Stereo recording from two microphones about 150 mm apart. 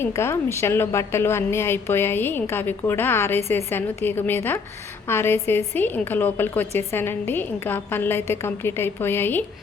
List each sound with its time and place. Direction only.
0.0 s a woman's voice: 15° left (ahead or behind)